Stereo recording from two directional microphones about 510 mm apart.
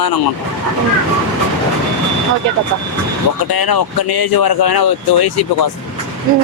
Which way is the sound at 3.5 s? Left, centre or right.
Left.